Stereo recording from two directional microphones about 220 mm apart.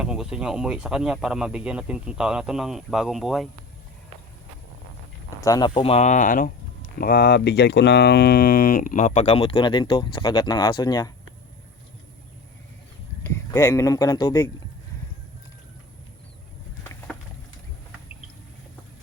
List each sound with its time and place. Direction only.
0.0 s speech: 5° right (ahead or behind)
5.4 s speech: 15° left (ahead or behind)
13.2 s speech: 15° left (ahead or behind)